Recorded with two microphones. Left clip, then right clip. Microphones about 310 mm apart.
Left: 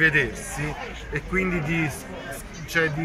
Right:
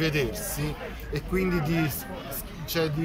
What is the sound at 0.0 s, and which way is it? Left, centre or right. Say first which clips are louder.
Speech: left 7 dB; centre.